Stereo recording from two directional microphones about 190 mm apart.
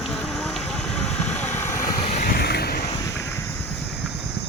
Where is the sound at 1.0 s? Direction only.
5° left (ahead or behind).